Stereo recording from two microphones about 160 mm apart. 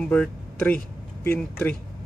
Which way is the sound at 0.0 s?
10° left (ahead or behind).